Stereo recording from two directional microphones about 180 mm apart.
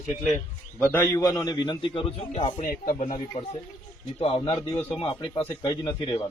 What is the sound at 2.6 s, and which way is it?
Speech, 50° left (ahead or behind).